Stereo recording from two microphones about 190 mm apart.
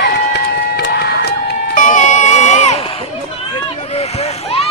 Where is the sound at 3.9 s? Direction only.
35° left (ahead or behind).